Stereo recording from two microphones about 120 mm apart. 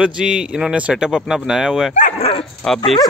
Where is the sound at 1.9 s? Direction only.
55° left (ahead or behind).